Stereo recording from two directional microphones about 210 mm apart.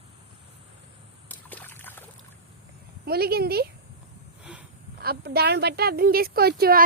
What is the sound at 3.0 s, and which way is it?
Speech, 45° right (ahead or behind).